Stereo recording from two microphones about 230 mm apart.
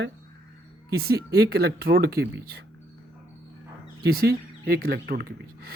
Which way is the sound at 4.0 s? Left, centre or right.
Right.